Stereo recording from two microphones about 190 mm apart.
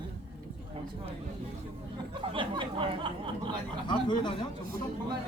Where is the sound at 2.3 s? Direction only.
25° right (ahead or behind).